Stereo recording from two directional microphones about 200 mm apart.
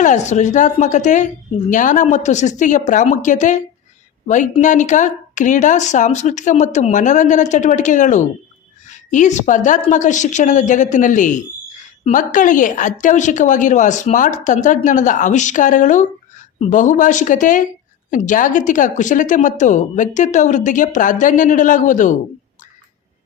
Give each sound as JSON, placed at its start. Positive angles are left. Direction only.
{"t": 0.0, "sound": "speech", "side_deg": 35}